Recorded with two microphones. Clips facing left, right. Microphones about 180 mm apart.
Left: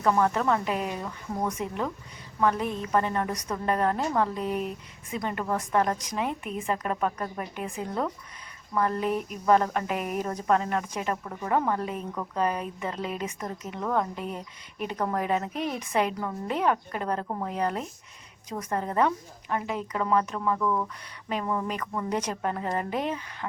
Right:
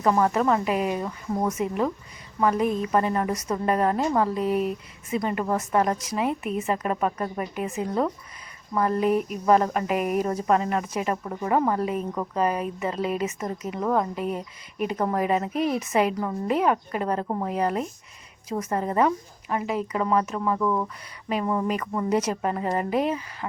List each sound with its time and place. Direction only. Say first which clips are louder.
0.0 s a woman's voice: right 3 dB; 10° right (ahead or behind)
12.4 s a woman's voice: right 3 dB; 5° right (ahead or behind)